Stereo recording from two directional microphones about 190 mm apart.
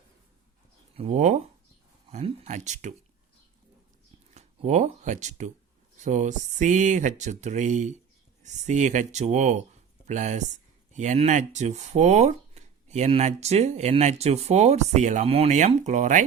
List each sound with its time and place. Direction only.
0.9 s speech: 35° right (ahead or behind)
4.4 s speech: 35° right (ahead or behind)